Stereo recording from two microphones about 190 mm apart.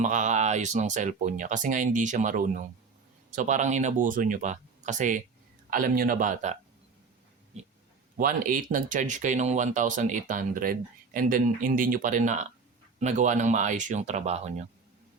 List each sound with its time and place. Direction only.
0.0 s speech: 40° right (ahead or behind)
8.2 s speech: 45° right (ahead or behind)